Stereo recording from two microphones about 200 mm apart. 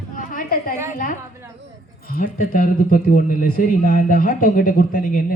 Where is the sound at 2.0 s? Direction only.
45° left (ahead or behind).